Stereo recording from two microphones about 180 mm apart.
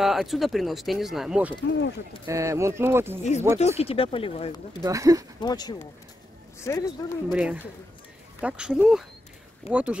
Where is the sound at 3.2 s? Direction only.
40° left (ahead or behind).